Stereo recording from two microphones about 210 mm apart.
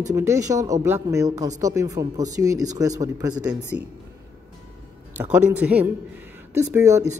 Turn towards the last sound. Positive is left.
turn(degrees=-15)  # may be behind; listen again after turning